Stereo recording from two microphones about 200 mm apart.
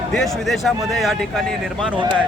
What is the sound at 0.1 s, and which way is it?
Speech, centre (ahead or behind).